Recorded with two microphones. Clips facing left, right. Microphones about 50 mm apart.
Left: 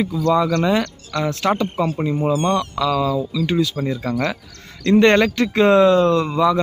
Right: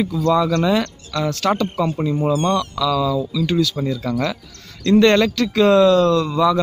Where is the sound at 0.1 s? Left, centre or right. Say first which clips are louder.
Even; centre.